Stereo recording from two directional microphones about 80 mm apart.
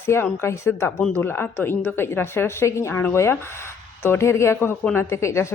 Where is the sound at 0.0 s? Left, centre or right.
Left.